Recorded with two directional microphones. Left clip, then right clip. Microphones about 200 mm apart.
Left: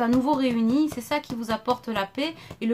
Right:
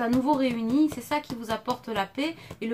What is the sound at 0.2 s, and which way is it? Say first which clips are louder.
Speech: left 1 dB; 50° left (ahead or behind).